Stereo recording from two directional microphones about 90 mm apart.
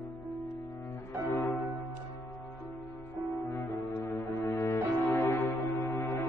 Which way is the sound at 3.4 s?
30° left (ahead or behind).